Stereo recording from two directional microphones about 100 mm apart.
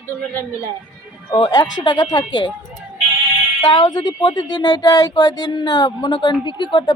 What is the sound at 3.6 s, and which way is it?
Speech, 45° left (ahead or behind).